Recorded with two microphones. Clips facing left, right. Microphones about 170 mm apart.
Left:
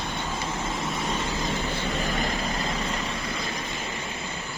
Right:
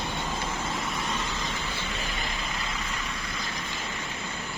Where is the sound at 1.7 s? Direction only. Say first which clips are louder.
Left 6 dB; 45° left (ahead or behind).